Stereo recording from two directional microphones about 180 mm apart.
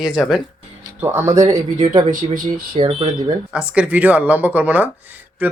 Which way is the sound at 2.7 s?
25° right (ahead or behind).